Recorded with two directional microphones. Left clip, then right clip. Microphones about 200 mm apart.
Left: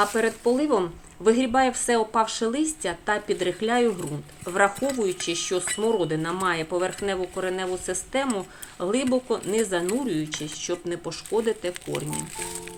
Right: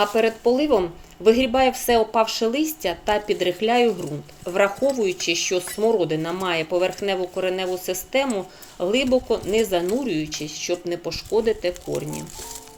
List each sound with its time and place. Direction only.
0.0 s speech: 15° left (ahead or behind)